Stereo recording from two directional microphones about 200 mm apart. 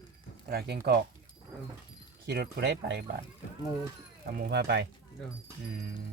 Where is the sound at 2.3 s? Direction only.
55° right (ahead or behind).